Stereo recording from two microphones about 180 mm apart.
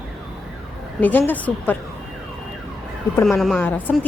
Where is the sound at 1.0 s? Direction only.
10° left (ahead or behind).